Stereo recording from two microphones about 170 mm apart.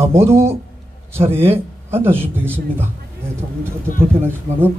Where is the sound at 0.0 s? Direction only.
15° right (ahead or behind).